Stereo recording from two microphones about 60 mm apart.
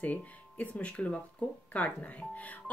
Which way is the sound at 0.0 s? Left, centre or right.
Left.